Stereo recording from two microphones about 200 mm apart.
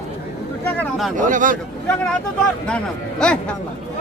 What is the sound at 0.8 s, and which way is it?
Speech, centre (ahead or behind).